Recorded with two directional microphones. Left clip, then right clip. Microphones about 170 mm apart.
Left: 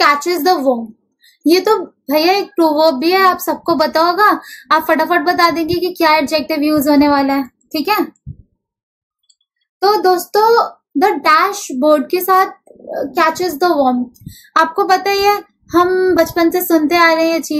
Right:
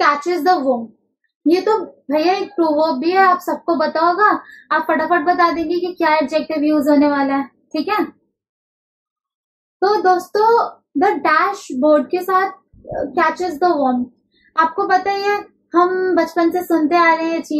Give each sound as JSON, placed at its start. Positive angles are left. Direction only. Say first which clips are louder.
{"t": 0.0, "sound": "a child's voice", "louder": "left 3 dB", "side_deg": 20}
{"t": 9.8, "sound": "a child's voice", "louder": "left 2 dB", "side_deg": 25}
{"t": 14.9, "sound": "a child's voice", "louder": "left 4 dB", "side_deg": 15}